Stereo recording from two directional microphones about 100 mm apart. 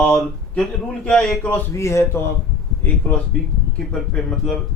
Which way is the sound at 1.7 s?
30° left (ahead or behind).